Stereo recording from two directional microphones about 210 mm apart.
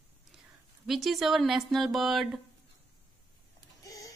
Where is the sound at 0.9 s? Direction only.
Centre (ahead or behind).